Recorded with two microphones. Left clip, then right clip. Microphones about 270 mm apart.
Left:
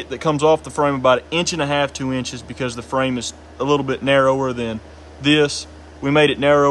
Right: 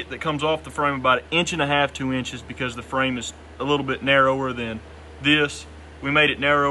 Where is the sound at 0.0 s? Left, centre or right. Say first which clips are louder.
Left 7 dB; centre.